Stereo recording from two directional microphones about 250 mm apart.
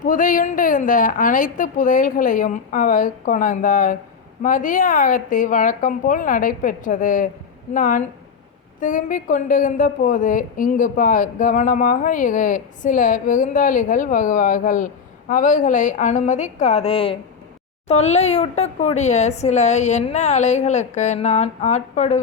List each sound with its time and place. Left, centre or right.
0.0 s a woman's voice: left